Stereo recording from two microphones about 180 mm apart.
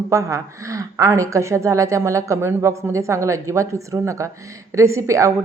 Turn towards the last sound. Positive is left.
turn(degrees=-15)  # may be behind; listen again after turning